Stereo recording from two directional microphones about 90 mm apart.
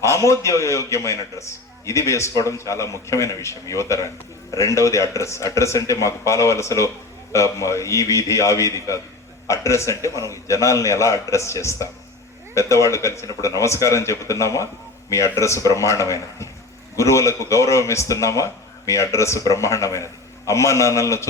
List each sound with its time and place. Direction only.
0.0 s a man's voice: 35° left (ahead or behind)